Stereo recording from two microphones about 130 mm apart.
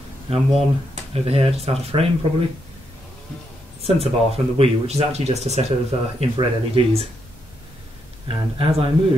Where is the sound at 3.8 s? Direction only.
50° right (ahead or behind).